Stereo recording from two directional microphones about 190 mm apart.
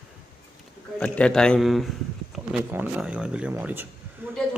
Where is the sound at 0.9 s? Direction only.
5° left (ahead or behind).